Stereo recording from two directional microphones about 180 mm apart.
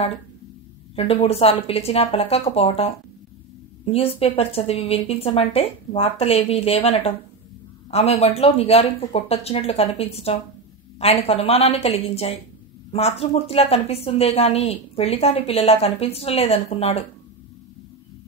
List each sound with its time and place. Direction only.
0.9 s a woman's voice: 35° left (ahead or behind)